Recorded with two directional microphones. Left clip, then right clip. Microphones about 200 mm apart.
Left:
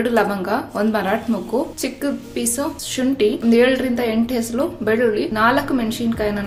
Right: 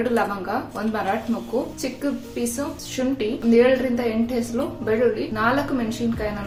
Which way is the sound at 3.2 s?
40° left (ahead or behind).